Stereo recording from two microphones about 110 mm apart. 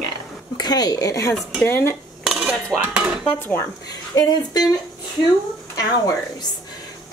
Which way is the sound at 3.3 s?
20° left (ahead or behind).